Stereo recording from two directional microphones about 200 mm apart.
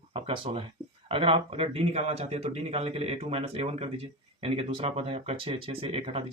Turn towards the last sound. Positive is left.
turn(degrees=-30)  # may be behind; listen again after turning